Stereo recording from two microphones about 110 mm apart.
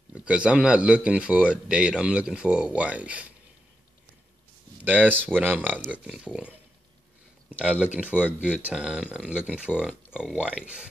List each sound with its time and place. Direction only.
0.1 s speech: 10° right (ahead or behind)
4.8 s speech: 15° right (ahead or behind)
7.6 s speech: 10° right (ahead or behind)